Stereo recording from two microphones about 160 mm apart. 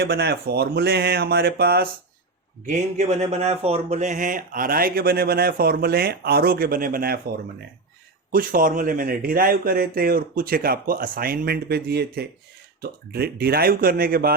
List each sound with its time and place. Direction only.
0.0 s speech: 90° right
2.6 s speech: 50° right (ahead or behind); by 7.2 s 65° right (ahead or behind)
8.3 s speech: 60° right (ahead or behind); by 12.3 s 85° right
12.8 s speech: 75° right (ahead or behind)